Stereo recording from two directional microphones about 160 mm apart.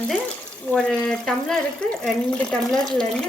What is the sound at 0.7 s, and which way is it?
Speech, 5° left (ahead or behind).